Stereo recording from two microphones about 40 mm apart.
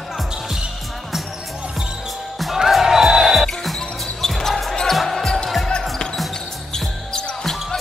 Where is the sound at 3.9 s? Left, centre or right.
Centre.